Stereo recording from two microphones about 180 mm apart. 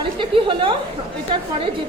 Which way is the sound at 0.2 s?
30° right (ahead or behind).